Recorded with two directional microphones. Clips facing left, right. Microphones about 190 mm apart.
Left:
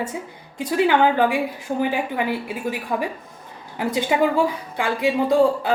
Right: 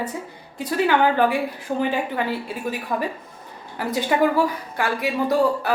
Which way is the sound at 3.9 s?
20° left (ahead or behind).